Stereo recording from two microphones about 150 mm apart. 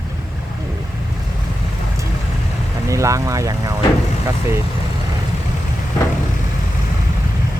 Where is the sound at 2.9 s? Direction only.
20° right (ahead or behind).